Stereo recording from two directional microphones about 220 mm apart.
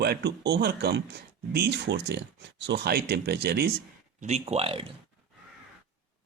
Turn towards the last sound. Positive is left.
turn(degrees=-25)  # may be behind; listen again after turning